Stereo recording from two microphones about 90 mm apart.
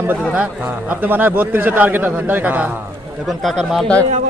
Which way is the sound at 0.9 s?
20° right (ahead or behind).